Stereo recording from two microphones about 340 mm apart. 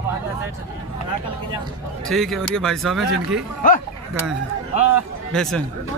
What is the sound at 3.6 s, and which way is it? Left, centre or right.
Speech, left.